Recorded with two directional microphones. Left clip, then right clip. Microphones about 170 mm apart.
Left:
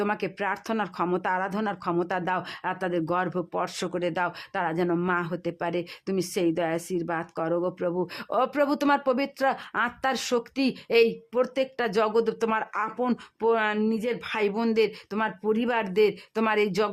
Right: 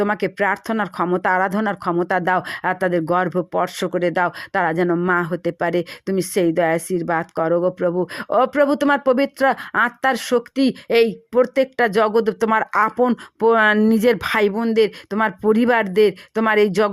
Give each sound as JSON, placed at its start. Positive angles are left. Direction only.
{"t": 0.0, "sound": "speech", "side_deg": -30}
{"t": 14.5, "sound": "speech", "side_deg": -25}